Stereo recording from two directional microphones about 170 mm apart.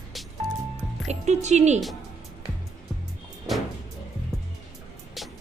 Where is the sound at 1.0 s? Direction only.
40° right (ahead or behind).